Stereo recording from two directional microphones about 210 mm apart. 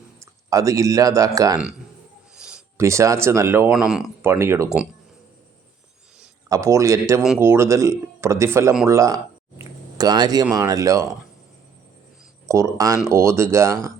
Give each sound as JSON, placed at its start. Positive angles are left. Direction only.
{"t": 0.2, "sound": "speech", "side_deg": -15}
{"t": 2.3, "sound": "a sound", "side_deg": -5}
{"t": 2.7, "sound": "speech", "side_deg": -15}
{"t": 6.5, "sound": "speech", "side_deg": -15}
{"t": 8.9, "sound": "a sound", "side_deg": -15}
{"t": 10.5, "sound": "speech", "side_deg": -15}
{"t": 12.5, "sound": "speech", "side_deg": -15}